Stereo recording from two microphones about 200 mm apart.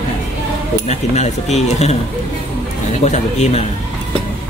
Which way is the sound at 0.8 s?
35° left (ahead or behind).